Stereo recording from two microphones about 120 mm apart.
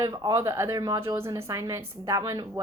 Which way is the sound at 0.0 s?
30° right (ahead or behind).